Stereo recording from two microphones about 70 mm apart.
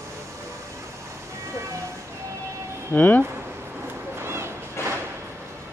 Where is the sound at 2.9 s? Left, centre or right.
Left.